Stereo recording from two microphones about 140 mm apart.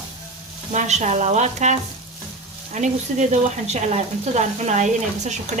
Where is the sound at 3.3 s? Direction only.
50° right (ahead or behind).